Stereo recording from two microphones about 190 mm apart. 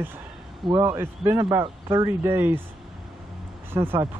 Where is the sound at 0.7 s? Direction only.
15° right (ahead or behind).